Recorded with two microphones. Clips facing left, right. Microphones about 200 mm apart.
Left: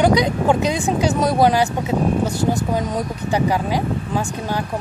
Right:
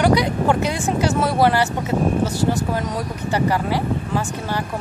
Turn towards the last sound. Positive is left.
turn(degrees=15)  # may be behind; listen again after turning